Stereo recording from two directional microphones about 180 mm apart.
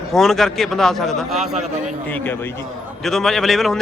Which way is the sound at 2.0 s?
10° left (ahead or behind).